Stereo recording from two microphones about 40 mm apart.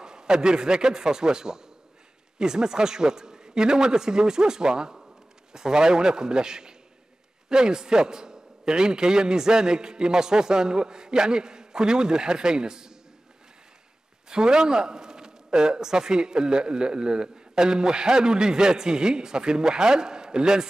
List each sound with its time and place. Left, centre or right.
0.0 s a man's voice: centre
14.3 s a man's voice: centre